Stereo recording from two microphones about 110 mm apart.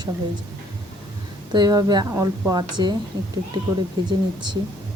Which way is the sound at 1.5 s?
40° right (ahead or behind).